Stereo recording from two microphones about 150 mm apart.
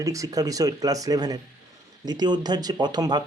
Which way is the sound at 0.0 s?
20° right (ahead or behind).